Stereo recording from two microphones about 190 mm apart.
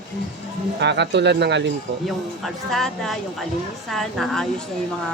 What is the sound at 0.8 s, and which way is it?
Speech, 65° right (ahead or behind).